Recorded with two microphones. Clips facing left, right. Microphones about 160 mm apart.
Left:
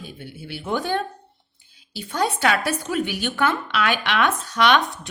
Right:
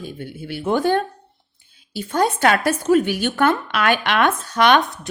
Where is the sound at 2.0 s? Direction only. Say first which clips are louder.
Right 4 dB; 50° right (ahead or behind).